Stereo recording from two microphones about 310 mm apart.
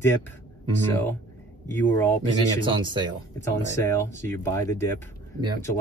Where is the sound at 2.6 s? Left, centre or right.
Centre.